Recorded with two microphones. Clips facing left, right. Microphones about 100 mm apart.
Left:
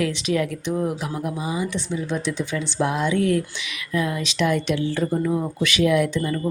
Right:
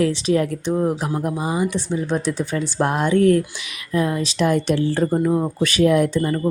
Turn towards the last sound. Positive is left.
turn(degrees=-40)  # may be behind; listen again after turning